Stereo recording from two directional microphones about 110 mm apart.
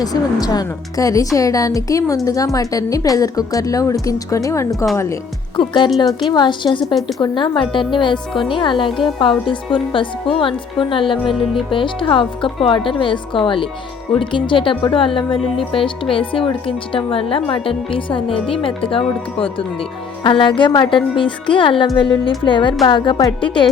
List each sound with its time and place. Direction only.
0.0 s a woman's voice: 35° left (ahead or behind)
5.5 s speech: 45° left (ahead or behind)
6.1 s a woman's voice: centre (ahead or behind)
6.3 s speech: 45° left (ahead or behind)